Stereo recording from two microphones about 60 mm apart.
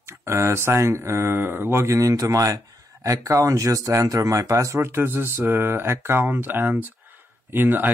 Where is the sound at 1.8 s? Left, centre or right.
Right.